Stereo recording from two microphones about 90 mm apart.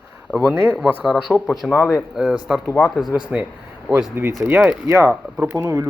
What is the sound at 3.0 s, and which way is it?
Speech, centre (ahead or behind).